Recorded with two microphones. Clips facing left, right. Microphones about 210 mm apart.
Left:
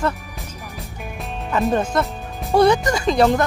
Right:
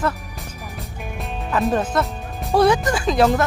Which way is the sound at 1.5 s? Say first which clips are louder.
Left 1 dB; centre (ahead or behind).